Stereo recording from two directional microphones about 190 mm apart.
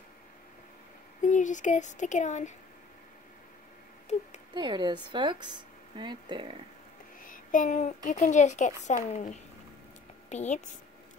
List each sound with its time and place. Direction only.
1.2 s speech: 40° left (ahead or behind)
4.1 s speech: 35° left (ahead or behind)
4.6 s speech: 25° right (ahead or behind)
7.2 s speech: 45° left (ahead or behind)